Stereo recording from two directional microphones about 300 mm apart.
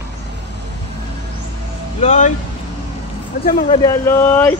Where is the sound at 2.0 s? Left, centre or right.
Left.